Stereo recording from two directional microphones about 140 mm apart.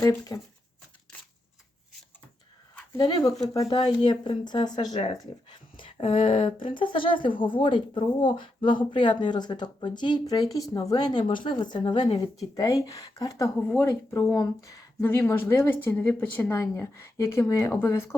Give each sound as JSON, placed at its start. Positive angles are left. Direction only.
{"t": 0.0, "sound": "a woman's voice", "side_deg": 20}
{"t": 3.0, "sound": "a woman's voice", "side_deg": 30}
{"t": 13.6, "sound": "a woman's voice", "side_deg": 15}